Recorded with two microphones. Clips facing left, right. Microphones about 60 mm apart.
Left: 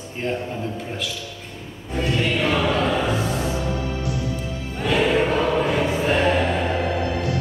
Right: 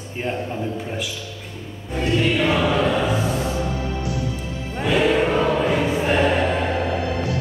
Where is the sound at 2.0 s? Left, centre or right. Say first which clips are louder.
Right 2 dB; centre.